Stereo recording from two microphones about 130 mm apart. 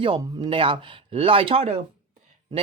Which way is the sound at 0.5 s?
45° right (ahead or behind).